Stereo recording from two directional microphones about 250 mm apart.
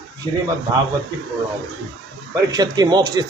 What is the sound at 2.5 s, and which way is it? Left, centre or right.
Speech, centre.